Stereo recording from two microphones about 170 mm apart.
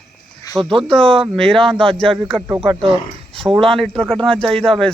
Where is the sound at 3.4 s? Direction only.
15° right (ahead or behind).